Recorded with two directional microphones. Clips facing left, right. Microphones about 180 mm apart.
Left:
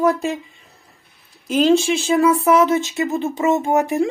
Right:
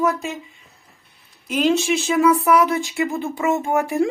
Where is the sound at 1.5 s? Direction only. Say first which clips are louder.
Left 3 dB; 30° left (ahead or behind).